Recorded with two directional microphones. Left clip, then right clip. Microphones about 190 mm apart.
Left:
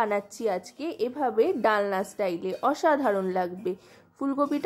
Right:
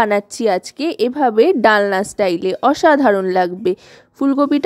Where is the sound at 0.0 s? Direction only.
40° right (ahead or behind).